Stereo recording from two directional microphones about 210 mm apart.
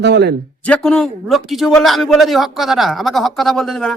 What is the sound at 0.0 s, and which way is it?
Speech, 50° right (ahead or behind).